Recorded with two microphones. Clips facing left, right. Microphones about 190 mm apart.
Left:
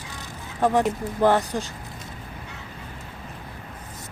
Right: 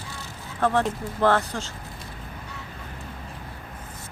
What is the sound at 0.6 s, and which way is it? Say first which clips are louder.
Speech: left 2 dB; 15° left (ahead or behind).